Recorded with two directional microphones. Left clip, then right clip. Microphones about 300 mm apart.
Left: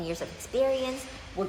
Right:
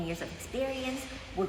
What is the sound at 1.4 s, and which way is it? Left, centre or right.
Speech, centre.